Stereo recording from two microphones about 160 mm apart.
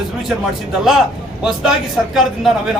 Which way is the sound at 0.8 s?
Centre (ahead or behind).